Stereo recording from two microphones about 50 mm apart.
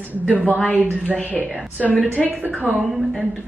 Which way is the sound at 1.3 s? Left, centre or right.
Left.